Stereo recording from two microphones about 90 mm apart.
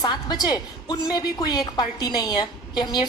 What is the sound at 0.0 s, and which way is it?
A woman's voice, 50° left (ahead or behind).